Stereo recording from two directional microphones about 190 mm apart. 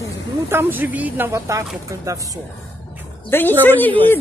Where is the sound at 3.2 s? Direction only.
10° left (ahead or behind).